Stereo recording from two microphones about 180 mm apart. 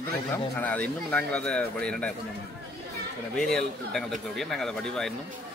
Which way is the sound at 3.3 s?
Centre (ahead or behind).